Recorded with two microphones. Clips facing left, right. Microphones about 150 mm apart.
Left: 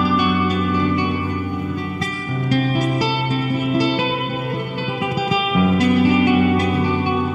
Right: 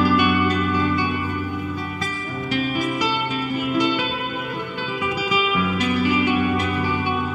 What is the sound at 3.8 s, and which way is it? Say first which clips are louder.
Music: left 1 dB; 30° left (ahead or behind).